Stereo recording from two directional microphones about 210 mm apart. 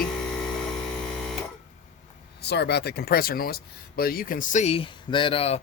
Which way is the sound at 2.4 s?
55° left (ahead or behind).